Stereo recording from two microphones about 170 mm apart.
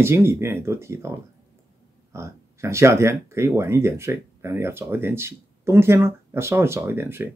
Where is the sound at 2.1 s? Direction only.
15° right (ahead or behind).